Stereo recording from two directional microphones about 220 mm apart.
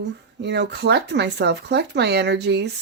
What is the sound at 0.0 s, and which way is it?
Speech, 50° right (ahead or behind).